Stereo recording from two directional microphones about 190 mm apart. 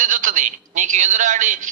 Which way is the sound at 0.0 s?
45° right (ahead or behind).